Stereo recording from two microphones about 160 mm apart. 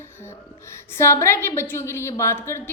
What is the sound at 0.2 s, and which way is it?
A woman's voice, 15° left (ahead or behind).